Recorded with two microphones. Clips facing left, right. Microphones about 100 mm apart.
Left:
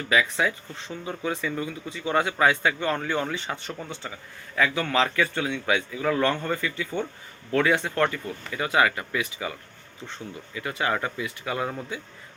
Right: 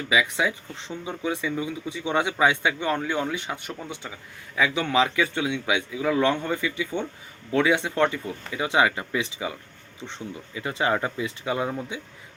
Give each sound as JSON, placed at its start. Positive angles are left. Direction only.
{"t": 0.1, "sound": "speech", "side_deg": -10}